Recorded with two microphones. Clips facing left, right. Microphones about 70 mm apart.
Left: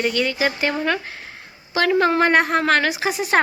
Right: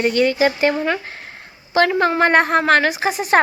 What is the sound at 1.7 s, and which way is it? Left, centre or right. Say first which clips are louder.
A woman's voice: right 2 dB; right.